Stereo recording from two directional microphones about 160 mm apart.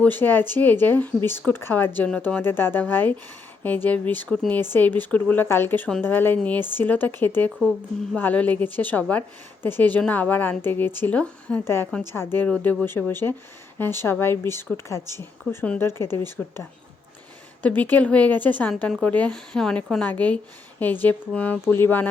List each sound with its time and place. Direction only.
0.0 s a woman's voice: 10° left (ahead or behind)